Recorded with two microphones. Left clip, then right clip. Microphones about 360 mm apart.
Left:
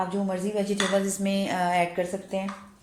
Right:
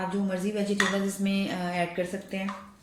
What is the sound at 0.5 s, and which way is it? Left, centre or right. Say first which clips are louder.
Speech: left 2 dB; centre.